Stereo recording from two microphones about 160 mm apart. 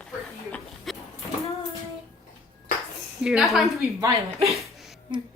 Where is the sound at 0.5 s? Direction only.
Centre (ahead or behind).